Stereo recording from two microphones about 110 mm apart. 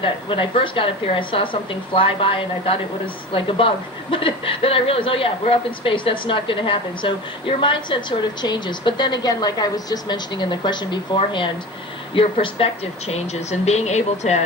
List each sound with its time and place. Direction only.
0.0 s a woman's voice: 50° left (ahead or behind); by 14.4 s 90° left